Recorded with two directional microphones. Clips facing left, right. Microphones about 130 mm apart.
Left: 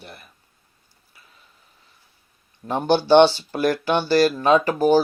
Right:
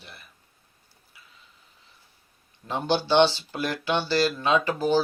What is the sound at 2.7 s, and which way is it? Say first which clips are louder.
Speech: left 7 dB; 50° left (ahead or behind).